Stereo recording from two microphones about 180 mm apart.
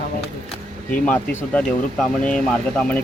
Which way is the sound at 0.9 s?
5° left (ahead or behind).